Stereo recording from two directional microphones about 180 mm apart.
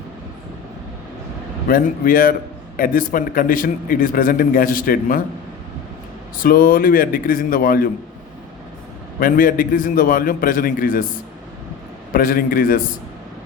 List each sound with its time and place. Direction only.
1.6 s a man's voice: 50° left (ahead or behind)
6.4 s a man's voice: 50° left (ahead or behind)
9.2 s a man's voice: 50° left (ahead or behind)
12.1 s a man's voice: 50° left (ahead or behind)